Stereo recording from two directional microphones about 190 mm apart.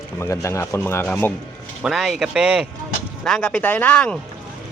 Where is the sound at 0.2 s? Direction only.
15° left (ahead or behind).